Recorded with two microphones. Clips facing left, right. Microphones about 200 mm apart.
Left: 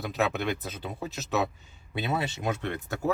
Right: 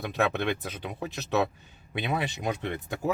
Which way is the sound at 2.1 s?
15° right (ahead or behind).